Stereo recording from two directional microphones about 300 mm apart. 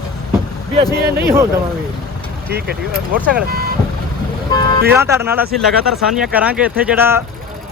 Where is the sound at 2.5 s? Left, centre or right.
Right.